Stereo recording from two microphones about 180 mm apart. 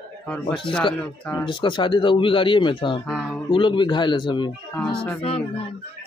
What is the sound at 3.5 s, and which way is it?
Speech, 25° left (ahead or behind).